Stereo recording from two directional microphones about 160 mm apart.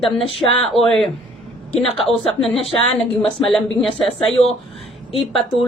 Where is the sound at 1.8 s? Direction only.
35° left (ahead or behind).